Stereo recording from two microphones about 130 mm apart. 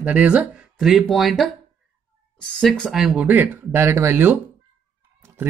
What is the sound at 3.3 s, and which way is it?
Speech, 20° right (ahead or behind).